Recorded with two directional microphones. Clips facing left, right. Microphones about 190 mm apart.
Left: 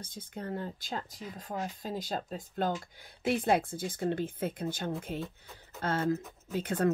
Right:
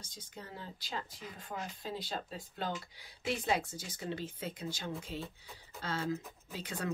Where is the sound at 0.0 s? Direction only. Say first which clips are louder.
Left 9 dB; 55° left (ahead or behind).